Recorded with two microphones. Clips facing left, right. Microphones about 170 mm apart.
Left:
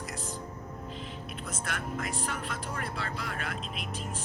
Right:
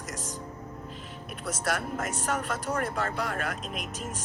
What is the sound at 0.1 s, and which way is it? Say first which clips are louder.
Music: right 1 dB; 40° right (ahead or behind).